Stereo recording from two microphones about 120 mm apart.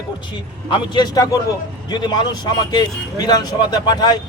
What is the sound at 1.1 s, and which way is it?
Speech, 30° left (ahead or behind).